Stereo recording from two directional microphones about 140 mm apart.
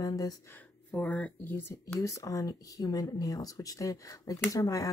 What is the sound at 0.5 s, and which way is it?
Speech, 10° left (ahead or behind).